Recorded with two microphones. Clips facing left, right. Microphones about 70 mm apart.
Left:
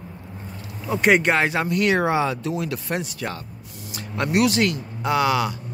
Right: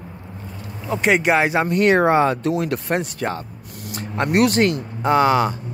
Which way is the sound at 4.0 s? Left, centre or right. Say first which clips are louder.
Right 3 dB; right.